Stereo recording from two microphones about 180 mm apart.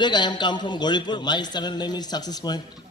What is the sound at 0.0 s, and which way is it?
A man's voice, 25° left (ahead or behind).